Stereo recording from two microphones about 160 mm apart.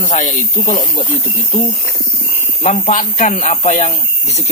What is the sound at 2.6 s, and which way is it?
Speech, 50° left (ahead or behind).